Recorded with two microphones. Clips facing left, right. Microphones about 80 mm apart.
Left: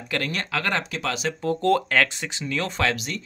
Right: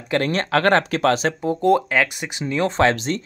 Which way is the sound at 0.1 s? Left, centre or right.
Right.